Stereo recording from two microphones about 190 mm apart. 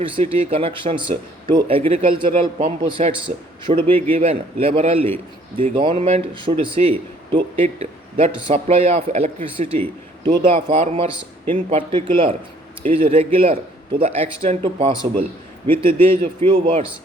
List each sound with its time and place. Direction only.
0.0 s a man's voice: 30° right (ahead or behind)
3.7 s a man's voice: 30° right (ahead or behind)
15.6 s a man's voice: 10° left (ahead or behind)
16.4 s speech: 25° right (ahead or behind)